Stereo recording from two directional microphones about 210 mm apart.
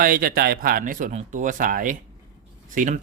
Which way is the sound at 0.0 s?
45° right (ahead or behind).